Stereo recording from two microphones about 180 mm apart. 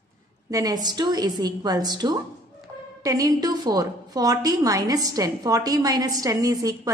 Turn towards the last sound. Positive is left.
turn(degrees=-20)  # may be behind; listen again after turning